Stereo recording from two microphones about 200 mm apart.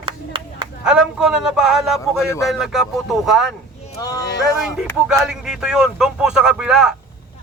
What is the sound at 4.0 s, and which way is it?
Speech, 20° left (ahead or behind).